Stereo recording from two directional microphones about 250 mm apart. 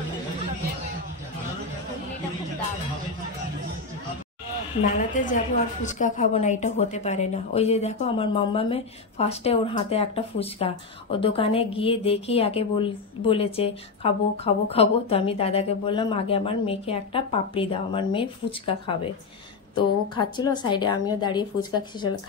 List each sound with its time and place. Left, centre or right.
4.9 s a woman's voice: left